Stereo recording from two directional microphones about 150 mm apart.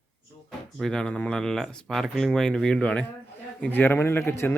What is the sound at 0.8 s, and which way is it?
A man's voice, 5° left (ahead or behind).